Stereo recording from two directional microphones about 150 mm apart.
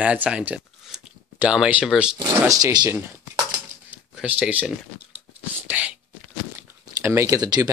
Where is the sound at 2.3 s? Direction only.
20° right (ahead or behind).